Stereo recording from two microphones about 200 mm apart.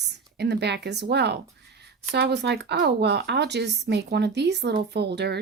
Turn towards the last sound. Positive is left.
turn(degrees=-60)  # may be behind; listen again after turning